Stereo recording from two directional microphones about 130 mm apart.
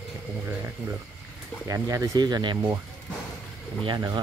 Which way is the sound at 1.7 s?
25° right (ahead or behind).